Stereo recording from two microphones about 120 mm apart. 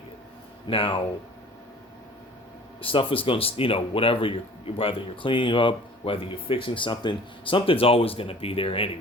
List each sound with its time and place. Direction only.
0.7 s speech: 50° left (ahead or behind)
2.8 s speech: 50° left (ahead or behind)